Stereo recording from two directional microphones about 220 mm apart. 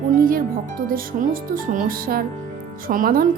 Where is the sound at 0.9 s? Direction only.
40° right (ahead or behind).